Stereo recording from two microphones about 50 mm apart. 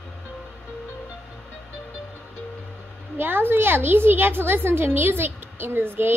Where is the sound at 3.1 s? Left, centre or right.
Right.